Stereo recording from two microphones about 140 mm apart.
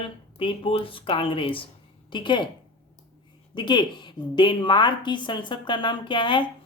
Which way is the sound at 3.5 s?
30° left (ahead or behind).